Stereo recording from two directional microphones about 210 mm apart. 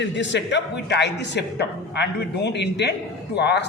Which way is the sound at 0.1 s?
60° left (ahead or behind).